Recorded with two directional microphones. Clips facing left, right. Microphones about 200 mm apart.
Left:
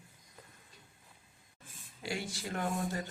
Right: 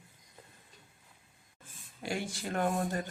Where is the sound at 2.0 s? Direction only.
55° right (ahead or behind).